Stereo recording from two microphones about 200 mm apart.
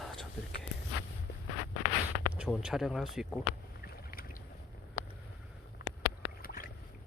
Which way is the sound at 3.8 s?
50° left (ahead or behind).